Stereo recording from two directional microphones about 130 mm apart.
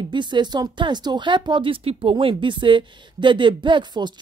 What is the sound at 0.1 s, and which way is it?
Speech, 35° right (ahead or behind).